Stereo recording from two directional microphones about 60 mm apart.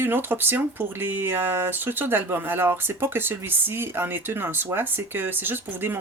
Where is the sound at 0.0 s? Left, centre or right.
Right.